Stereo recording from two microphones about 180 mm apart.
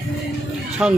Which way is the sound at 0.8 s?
5° right (ahead or behind).